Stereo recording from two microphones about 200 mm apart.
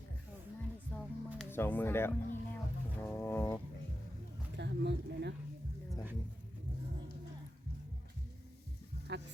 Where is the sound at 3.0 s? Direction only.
10° left (ahead or behind).